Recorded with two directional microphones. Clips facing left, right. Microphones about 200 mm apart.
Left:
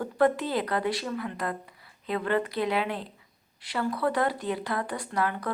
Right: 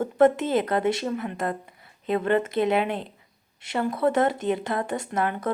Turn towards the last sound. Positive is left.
turn(degrees=-20)  # may be behind; listen again after turning